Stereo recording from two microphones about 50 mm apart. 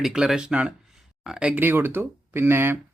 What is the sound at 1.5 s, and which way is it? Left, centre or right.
Speech, right.